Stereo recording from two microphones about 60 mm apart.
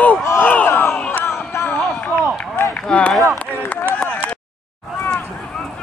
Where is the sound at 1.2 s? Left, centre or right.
Left.